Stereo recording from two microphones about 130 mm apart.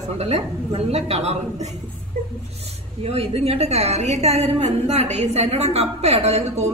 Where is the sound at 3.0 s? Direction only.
50° right (ahead or behind).